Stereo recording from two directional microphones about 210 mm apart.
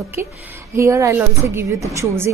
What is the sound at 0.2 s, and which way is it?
A woman's voice, 10° right (ahead or behind).